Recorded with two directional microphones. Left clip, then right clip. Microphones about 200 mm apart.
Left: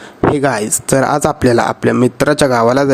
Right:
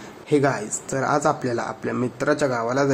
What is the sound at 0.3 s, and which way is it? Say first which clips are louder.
Speech: left 6 dB; 40° left (ahead or behind).